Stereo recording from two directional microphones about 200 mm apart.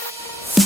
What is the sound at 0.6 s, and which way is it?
Music, centre (ahead or behind).